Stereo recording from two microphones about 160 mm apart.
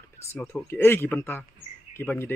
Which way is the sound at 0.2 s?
15° left (ahead or behind).